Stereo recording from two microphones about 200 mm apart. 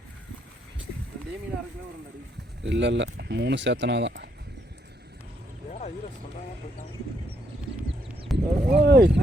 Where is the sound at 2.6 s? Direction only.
65° right (ahead or behind).